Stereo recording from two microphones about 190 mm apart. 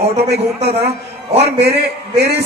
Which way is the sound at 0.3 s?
35° right (ahead or behind).